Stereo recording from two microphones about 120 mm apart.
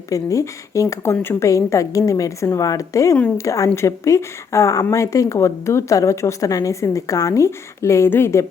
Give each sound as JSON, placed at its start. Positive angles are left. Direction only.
{"t": 0.1, "sound": "speech", "side_deg": 25}